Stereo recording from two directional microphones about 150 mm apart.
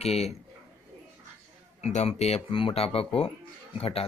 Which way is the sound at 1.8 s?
50° left (ahead or behind).